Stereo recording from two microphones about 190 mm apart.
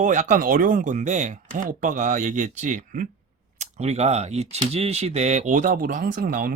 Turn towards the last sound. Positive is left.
turn(degrees=-50)  # may be behind; listen again after turning